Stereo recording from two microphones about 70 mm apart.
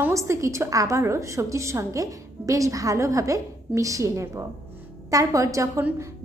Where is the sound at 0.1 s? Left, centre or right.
Right.